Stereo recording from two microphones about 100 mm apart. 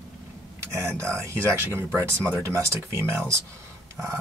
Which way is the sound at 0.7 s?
25° right (ahead or behind).